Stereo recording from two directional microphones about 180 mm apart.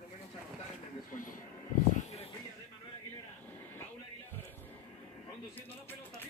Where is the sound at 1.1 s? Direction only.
50° left (ahead or behind).